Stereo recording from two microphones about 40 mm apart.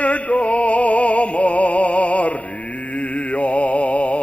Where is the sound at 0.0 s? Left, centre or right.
Left.